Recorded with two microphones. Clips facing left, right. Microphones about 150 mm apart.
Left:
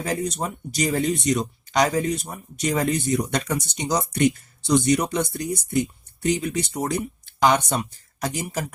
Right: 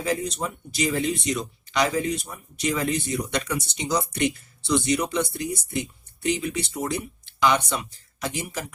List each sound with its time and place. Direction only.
0.0 s speech: 45° left (ahead or behind)